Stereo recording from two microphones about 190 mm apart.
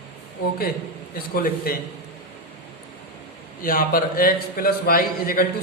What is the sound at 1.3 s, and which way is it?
Speech, 50° left (ahead or behind).